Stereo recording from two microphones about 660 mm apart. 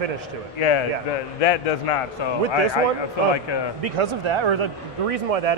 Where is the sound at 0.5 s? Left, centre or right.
Left.